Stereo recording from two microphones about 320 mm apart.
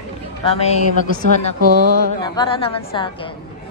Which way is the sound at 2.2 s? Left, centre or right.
Centre.